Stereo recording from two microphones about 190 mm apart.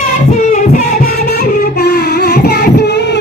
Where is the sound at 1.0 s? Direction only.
55° left (ahead or behind).